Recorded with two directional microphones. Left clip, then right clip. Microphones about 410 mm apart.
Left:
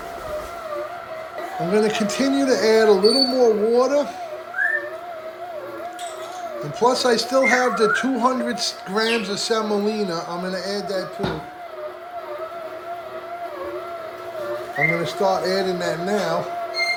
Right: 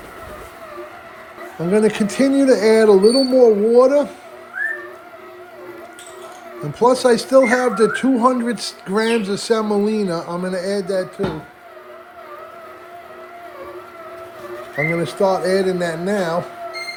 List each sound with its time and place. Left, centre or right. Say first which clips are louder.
1.7 s speech: right 3 dB; centre
6.6 s speech: right 4 dB; centre
14.9 s speech: right 3 dB; centre